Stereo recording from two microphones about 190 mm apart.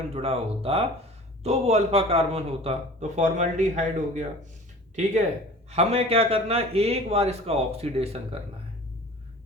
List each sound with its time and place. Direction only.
0.1 s speech: 30° right (ahead or behind)
5.7 s speech: 30° right (ahead or behind)